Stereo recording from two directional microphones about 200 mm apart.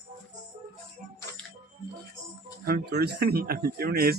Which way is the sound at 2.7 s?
50° right (ahead or behind).